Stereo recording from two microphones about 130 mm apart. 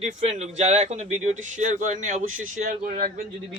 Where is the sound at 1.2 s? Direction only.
70° right (ahead or behind); by 3.2 s 90° right.